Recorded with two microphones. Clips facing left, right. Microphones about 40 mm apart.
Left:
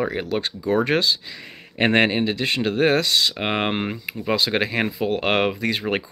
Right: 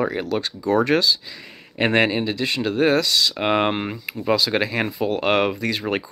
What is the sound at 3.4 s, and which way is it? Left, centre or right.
Speech, centre.